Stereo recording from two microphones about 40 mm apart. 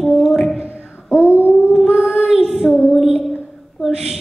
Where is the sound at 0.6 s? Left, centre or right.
Left.